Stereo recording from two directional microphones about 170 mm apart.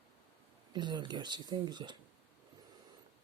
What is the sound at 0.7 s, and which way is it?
Speech, 25° right (ahead or behind).